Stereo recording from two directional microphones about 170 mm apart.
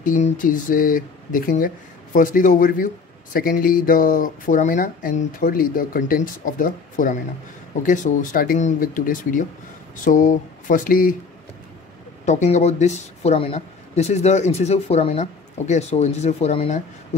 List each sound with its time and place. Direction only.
0.0 s speech: 50° left (ahead or behind)
12.3 s speech: 45° left (ahead or behind)